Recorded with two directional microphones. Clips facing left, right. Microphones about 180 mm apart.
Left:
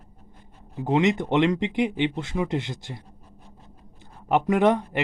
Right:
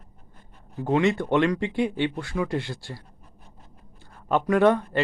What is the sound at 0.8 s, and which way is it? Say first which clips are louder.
Speech: even; 20° left (ahead or behind).